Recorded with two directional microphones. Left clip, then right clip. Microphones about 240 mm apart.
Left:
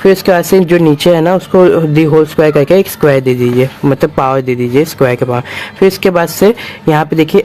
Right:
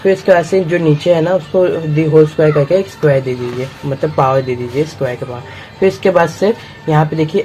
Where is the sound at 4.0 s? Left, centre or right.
Left.